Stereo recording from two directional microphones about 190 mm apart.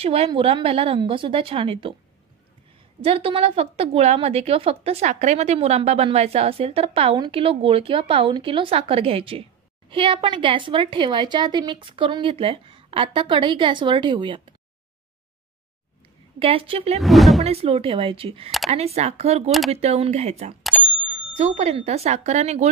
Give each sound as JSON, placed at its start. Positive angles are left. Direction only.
{"t": 0.0, "sound": "a woman's voice", "side_deg": -30}
{"t": 3.0, "sound": "a woman's voice", "side_deg": -30}
{"t": 16.3, "sound": "a woman's voice", "side_deg": -30}
{"t": 17.0, "sound": "speech", "side_deg": 0}
{"t": 17.4, "sound": "a woman's voice", "side_deg": -30}